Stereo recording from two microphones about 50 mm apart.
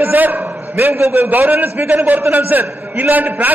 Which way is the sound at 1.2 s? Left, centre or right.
Right.